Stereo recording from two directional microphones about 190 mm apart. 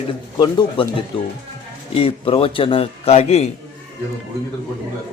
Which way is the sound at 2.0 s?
30° left (ahead or behind).